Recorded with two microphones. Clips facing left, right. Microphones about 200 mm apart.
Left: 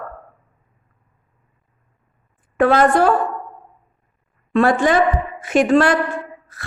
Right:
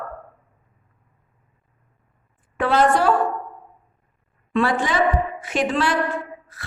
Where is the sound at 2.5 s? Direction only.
50° left (ahead or behind).